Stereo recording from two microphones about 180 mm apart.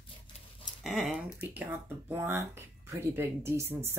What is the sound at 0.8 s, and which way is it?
Speech, 5° right (ahead or behind).